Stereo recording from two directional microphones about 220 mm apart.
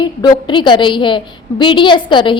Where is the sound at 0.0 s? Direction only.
20° left (ahead or behind).